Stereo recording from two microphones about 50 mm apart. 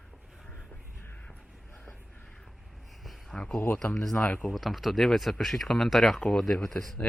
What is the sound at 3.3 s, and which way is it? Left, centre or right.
Speech, centre.